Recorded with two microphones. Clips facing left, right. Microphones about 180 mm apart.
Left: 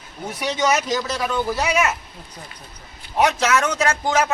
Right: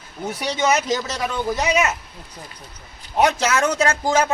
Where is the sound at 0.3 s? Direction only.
25° right (ahead or behind).